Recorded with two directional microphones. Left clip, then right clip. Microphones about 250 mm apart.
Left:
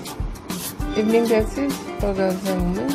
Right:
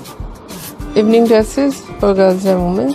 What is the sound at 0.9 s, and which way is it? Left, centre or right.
Speech, right.